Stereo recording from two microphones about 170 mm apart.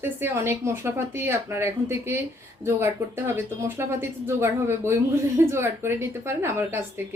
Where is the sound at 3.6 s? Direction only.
15° right (ahead or behind).